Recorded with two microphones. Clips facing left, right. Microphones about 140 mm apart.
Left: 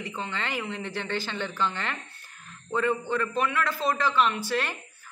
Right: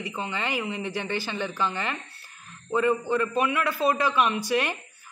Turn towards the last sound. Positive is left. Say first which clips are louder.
# right 3 dB
turn(degrees=-15)  # may be behind; listen again after turning